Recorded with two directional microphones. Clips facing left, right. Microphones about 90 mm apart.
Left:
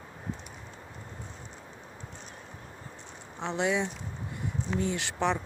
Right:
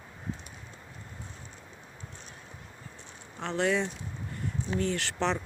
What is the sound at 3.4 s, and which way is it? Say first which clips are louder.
Speech: right 1 dB; 15° left (ahead or behind).